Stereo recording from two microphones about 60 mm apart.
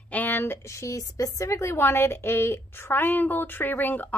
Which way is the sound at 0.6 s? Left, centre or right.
Left.